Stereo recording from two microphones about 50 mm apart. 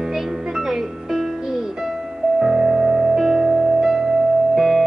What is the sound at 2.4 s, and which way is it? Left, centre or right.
Music, centre.